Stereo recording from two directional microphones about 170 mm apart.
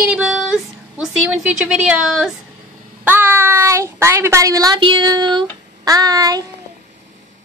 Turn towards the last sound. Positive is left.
turn(degrees=-20)  # may be behind; listen again after turning